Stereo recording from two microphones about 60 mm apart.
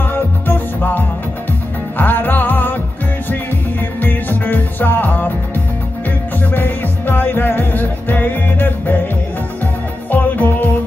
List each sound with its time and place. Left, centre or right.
0.1 s music: left
4.0 s music: left
6.5 s music: left
10.1 s music: left